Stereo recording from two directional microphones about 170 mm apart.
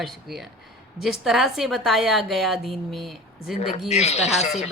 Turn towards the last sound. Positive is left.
turn(degrees=40)  # may be behind; listen again after turning